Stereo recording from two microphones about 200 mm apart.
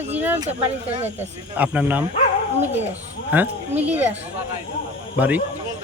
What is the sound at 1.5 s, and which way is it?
Speech, 10° right (ahead or behind).